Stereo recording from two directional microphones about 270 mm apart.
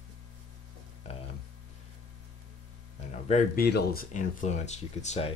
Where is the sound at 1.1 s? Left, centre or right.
Left.